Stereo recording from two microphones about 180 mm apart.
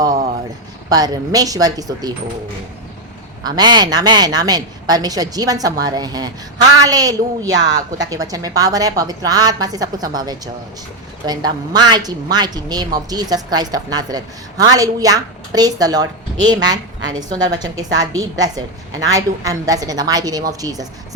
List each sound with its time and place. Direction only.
0.9 s a woman's voice: 20° right (ahead or behind)
3.4 s a woman's voice: 25° right (ahead or behind)